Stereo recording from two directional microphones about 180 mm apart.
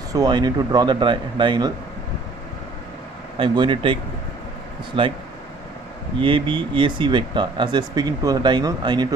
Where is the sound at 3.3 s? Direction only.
30° right (ahead or behind).